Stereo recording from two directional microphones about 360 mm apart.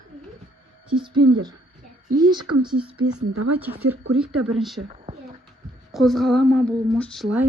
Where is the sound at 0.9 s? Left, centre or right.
Centre.